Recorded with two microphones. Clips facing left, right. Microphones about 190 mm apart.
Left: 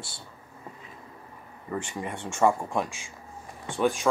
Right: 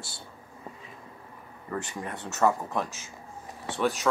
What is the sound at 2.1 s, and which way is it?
Speech, 5° right (ahead or behind).